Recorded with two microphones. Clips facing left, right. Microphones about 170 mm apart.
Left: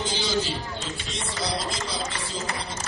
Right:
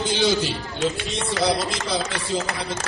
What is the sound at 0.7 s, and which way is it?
Speech, 75° right (ahead or behind).